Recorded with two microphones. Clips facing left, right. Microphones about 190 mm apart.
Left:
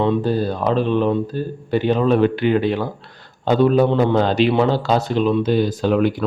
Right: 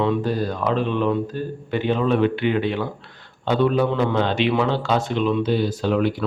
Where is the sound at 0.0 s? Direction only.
30° left (ahead or behind).